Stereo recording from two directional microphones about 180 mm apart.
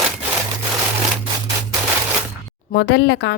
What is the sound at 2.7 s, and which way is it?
Speech, 65° left (ahead or behind).